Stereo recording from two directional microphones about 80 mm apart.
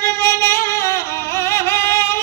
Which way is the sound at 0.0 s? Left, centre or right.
Left.